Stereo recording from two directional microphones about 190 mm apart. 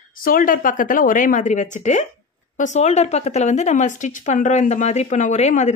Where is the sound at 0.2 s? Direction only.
45° left (ahead or behind).